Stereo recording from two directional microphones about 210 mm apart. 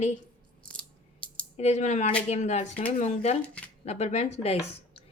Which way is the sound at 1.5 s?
30° left (ahead or behind).